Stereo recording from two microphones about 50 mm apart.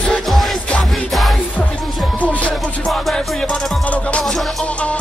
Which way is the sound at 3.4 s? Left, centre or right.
Left.